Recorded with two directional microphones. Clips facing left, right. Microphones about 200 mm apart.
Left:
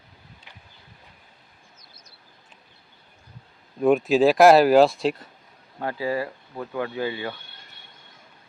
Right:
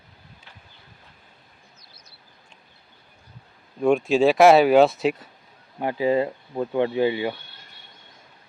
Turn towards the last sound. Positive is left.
turn(degrees=-20)  # may be behind; listen again after turning